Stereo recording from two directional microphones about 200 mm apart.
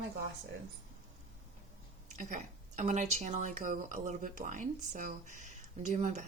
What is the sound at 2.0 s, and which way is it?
Speech, 35° right (ahead or behind).